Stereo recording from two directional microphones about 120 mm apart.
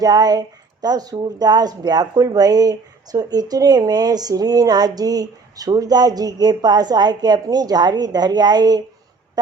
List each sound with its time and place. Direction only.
0.0 s speech: 35° right (ahead or behind)